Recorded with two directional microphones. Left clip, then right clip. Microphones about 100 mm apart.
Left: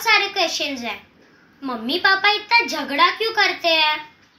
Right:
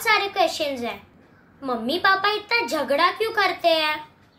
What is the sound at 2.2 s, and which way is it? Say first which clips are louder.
A child's voice: left 5 dB; 40° right (ahead or behind).